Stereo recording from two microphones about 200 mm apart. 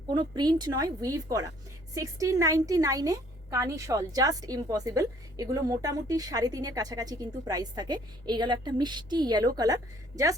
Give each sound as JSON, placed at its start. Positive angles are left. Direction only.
{"t": 0.1, "sound": "a woman's voice", "side_deg": -20}